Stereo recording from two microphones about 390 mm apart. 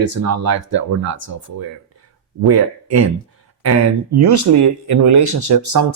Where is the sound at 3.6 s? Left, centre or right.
Right.